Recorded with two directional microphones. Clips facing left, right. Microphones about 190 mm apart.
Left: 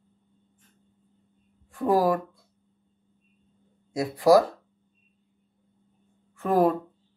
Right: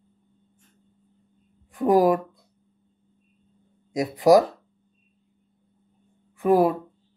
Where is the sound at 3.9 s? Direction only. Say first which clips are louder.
Right 2 dB; 20° right (ahead or behind).